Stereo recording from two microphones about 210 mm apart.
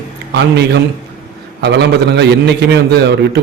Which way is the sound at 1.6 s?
55° right (ahead or behind).